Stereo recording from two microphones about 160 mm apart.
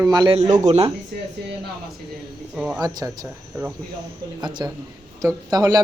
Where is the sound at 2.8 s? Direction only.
25° right (ahead or behind).